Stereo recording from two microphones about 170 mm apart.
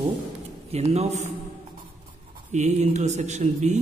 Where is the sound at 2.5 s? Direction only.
45° right (ahead or behind).